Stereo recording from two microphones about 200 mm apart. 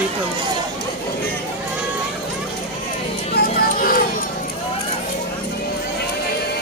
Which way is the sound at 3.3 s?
50° left (ahead or behind).